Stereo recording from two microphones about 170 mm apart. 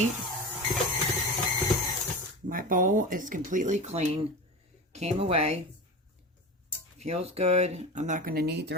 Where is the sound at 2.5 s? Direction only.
55° right (ahead or behind); by 5.5 s 35° right (ahead or behind).